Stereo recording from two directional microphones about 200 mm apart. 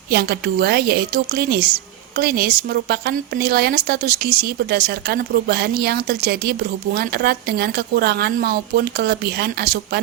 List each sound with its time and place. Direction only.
0.1 s a woman's voice: 50° right (ahead or behind)